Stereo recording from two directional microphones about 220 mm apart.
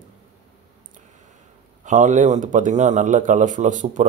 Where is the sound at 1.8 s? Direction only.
35° right (ahead or behind).